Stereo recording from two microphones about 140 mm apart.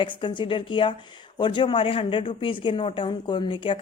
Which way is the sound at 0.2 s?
35° left (ahead or behind).